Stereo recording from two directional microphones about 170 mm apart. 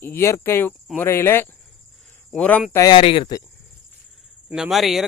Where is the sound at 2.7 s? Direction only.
25° left (ahead or behind).